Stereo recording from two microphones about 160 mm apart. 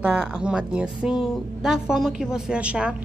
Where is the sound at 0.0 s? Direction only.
5° right (ahead or behind).